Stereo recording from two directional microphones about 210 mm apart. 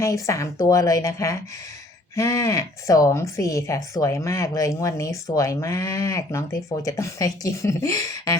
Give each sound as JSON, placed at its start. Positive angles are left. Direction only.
{"t": 0.0, "sound": "speech", "side_deg": 15}